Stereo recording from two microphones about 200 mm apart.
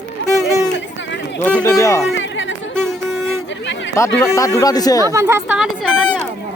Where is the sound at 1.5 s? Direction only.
10° left (ahead or behind).